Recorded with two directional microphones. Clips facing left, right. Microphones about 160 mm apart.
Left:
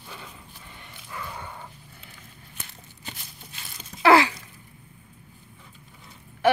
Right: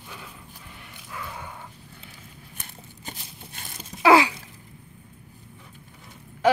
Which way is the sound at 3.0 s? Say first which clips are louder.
Right 1 dB; 50° right (ahead or behind).